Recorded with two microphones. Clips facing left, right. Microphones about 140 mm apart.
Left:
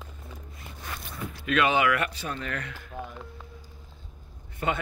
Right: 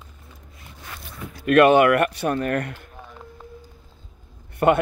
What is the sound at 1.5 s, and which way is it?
Speech, 55° right (ahead or behind).